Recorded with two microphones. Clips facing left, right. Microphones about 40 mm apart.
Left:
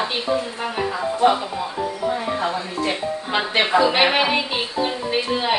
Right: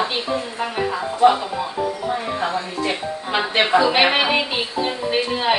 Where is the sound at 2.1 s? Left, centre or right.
Centre.